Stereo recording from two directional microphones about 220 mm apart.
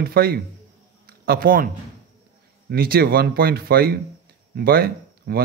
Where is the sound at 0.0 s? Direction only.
45° right (ahead or behind).